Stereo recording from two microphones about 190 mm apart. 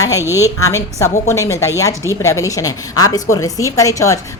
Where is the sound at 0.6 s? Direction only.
15° left (ahead or behind).